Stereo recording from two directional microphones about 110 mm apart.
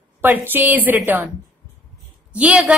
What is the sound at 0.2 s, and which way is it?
A woman's voice, 20° right (ahead or behind).